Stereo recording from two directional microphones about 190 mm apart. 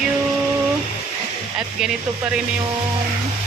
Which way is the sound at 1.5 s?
5° right (ahead or behind).